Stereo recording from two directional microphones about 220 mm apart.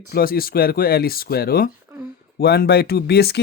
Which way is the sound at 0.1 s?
45° left (ahead or behind).